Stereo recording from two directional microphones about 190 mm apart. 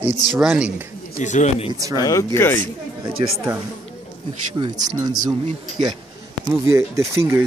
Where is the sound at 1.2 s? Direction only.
40° left (ahead or behind).